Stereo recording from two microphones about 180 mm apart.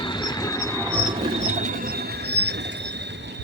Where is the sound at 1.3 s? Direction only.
40° right (ahead or behind); by 3.3 s 75° right (ahead or behind).